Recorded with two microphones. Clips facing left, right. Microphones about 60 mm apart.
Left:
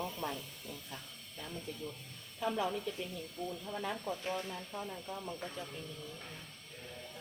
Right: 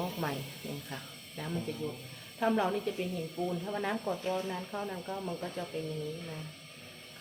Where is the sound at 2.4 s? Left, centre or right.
Right.